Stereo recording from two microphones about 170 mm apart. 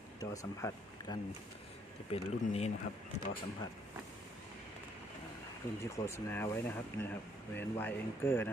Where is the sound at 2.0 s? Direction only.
35° left (ahead or behind).